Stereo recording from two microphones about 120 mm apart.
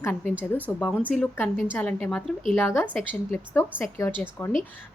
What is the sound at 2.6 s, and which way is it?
A woman's voice, 15° left (ahead or behind).